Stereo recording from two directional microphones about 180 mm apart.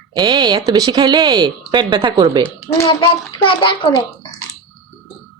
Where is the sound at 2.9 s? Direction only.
30° left (ahead or behind).